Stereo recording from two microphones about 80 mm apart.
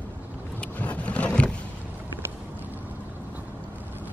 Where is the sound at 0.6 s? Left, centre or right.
Centre.